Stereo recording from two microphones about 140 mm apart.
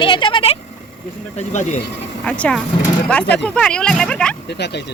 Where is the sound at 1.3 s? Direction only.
55° left (ahead or behind).